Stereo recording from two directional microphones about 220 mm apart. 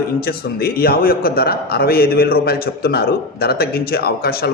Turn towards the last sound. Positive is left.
turn(degrees=45)  # may be behind; listen again after turning